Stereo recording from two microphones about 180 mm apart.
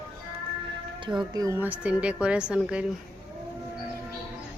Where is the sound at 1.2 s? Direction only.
20° right (ahead or behind).